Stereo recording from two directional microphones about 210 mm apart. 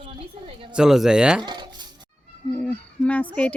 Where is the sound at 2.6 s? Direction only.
5° left (ahead or behind).